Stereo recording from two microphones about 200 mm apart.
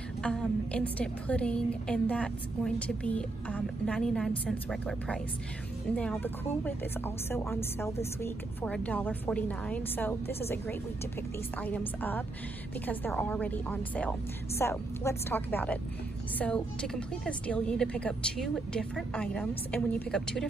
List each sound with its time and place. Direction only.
0.2 s a woman's voice: 5° left (ahead or behind)